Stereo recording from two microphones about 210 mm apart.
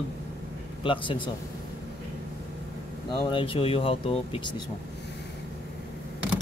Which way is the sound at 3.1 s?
25° left (ahead or behind).